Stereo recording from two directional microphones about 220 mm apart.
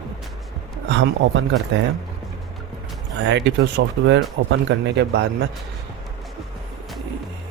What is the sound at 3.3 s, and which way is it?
Speech, 55° right (ahead or behind).